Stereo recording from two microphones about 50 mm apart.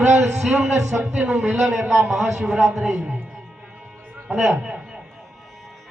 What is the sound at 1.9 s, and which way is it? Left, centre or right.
A man's voice, centre.